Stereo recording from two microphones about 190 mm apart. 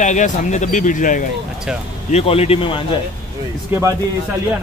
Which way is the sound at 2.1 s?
30° left (ahead or behind).